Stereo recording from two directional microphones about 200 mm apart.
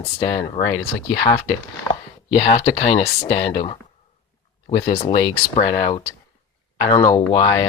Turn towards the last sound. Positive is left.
turn(degrees=20)  # may be behind; listen again after turning